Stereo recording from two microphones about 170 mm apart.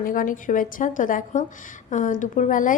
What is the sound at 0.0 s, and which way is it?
A woman's voice, 55° left (ahead or behind).